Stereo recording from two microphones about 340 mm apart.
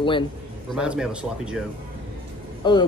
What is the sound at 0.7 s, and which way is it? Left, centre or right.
Speech, centre.